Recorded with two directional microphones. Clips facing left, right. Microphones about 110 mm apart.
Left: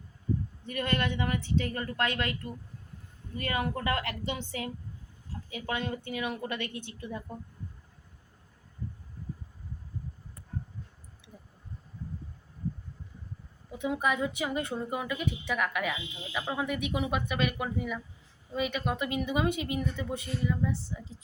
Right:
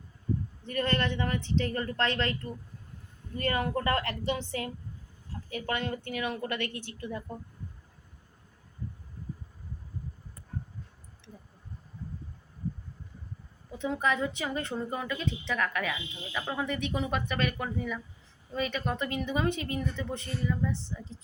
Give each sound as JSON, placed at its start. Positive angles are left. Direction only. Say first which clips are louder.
{"t": 0.6, "sound": "a woman's voice", "louder": "right 2 dB", "side_deg": 10}
{"t": 11.2, "sound": "a sound", "louder": "right 2 dB", "side_deg": 10}
{"t": 13.7, "sound": "a woman's voice", "louder": "even", "side_deg": 15}